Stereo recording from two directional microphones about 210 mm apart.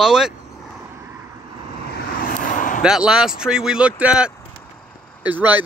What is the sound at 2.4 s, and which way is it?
Vehicle, 40° left (ahead or behind).